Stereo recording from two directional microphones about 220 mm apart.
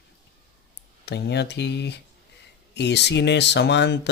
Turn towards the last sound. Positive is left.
turn(degrees=50)  # may be behind; listen again after turning